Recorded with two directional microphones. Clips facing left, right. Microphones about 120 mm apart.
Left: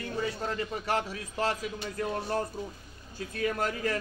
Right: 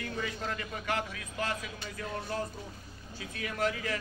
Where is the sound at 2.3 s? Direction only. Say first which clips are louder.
Left 5 dB; 50° left (ahead or behind).